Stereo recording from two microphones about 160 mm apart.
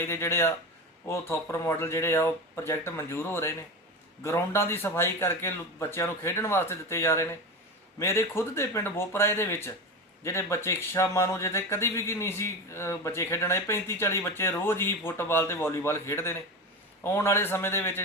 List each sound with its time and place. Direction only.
0.0 s speech: 15° left (ahead or behind)